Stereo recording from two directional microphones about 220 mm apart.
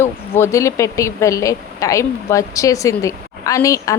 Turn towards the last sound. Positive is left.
turn(degrees=15)  # may be behind; listen again after turning